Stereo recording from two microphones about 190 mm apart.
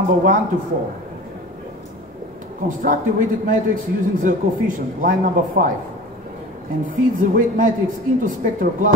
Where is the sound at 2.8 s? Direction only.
45° right (ahead or behind).